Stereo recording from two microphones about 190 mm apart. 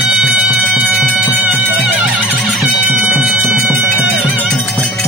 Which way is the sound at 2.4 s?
Centre (ahead or behind).